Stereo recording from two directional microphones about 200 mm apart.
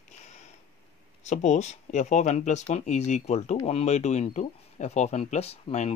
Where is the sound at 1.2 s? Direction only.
35° left (ahead or behind).